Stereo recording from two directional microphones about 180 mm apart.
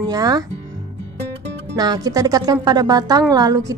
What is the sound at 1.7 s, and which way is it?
Speech, 20° right (ahead or behind).